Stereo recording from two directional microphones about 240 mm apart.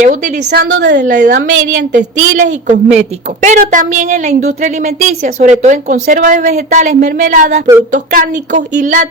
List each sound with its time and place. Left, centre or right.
0.0 s a woman's voice: right
1.6 s a sound: right
2.5 s a woman's voice: right